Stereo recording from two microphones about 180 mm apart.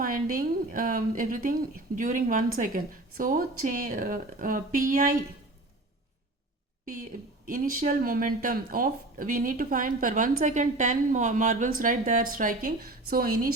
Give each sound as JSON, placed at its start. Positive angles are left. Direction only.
{"t": 0.0, "sound": "speech", "side_deg": -50}
{"t": 6.8, "sound": "speech", "side_deg": -50}